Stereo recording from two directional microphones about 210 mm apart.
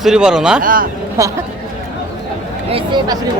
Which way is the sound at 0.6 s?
40° right (ahead or behind).